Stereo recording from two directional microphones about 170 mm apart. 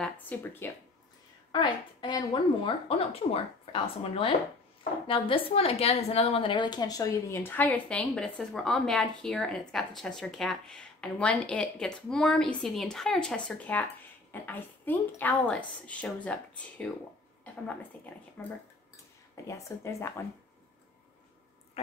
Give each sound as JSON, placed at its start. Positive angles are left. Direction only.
{"t": 0.0, "sound": "speech", "side_deg": 10}
{"t": 1.5, "sound": "a woman's voice", "side_deg": 25}
{"t": 17.9, "sound": "a woman's voice", "side_deg": 10}